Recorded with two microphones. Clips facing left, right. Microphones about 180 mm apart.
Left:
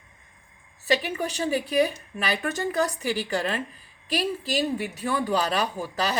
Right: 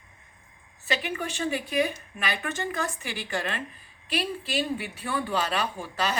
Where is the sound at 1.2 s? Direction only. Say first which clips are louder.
Left 3 dB; 40° left (ahead or behind).